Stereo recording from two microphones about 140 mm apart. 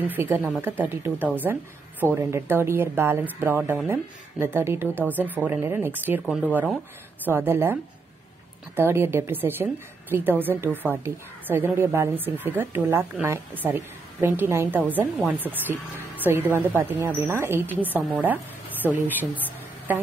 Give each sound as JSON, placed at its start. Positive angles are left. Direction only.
{"t": 0.0, "sound": "a woman's voice", "side_deg": -15}
{"t": 6.2, "sound": "speech", "side_deg": -5}
{"t": 7.2, "sound": "a woman's voice", "side_deg": -15}
{"t": 18.9, "sound": "a woman's voice", "side_deg": -10}